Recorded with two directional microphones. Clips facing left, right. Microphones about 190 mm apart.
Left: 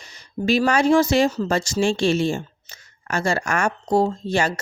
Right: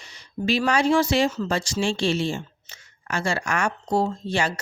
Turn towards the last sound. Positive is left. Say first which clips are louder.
# left 3 dB
turn(degrees=45)  # may be behind; listen again after turning